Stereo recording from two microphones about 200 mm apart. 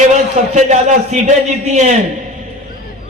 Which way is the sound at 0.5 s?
35° right (ahead or behind).